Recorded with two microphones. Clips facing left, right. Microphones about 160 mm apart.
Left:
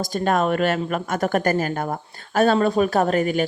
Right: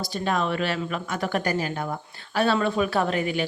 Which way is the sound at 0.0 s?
45° left (ahead or behind).